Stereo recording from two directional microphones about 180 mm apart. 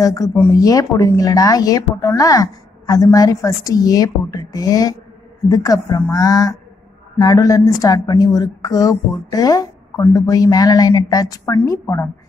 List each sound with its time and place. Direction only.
0.0 s a woman's voice: 20° left (ahead or behind)